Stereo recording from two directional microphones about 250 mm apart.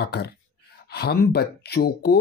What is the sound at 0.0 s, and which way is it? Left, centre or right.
Speech, left.